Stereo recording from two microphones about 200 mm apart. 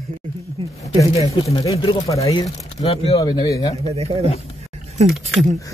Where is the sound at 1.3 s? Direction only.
30° left (ahead or behind).